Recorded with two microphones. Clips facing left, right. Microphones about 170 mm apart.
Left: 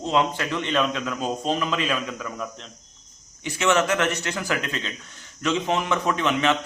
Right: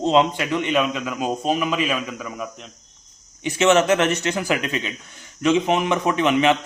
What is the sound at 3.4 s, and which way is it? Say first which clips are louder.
A man's voice: right 5 dB; 20° right (ahead or behind).